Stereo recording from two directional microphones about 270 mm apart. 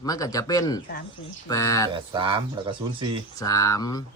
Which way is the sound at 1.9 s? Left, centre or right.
Centre.